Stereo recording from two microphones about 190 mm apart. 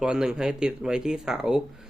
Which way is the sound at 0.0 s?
5° right (ahead or behind).